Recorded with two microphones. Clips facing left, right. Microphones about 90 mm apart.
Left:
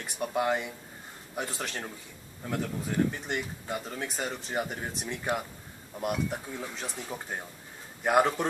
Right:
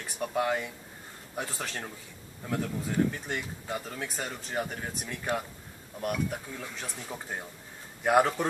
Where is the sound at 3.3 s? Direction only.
10° left (ahead or behind).